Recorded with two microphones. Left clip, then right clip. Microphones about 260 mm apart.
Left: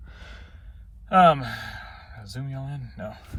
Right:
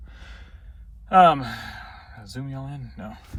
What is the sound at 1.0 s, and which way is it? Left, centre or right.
Speech, centre.